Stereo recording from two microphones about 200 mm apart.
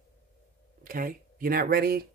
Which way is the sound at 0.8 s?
45° right (ahead or behind).